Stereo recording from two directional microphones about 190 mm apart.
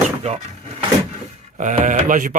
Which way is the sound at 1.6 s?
40° right (ahead or behind).